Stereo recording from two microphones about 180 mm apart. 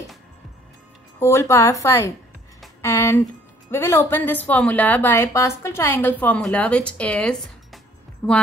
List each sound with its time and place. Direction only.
1.2 s a woman's voice: 15° left (ahead or behind)